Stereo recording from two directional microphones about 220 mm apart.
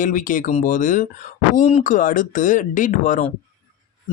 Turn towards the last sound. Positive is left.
turn(degrees=35)  # may be behind; listen again after turning